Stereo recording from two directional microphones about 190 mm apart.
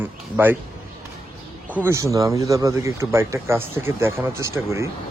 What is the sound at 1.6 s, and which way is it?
Speech, 10° right (ahead or behind).